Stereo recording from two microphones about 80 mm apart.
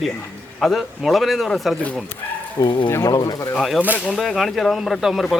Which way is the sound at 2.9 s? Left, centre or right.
Left.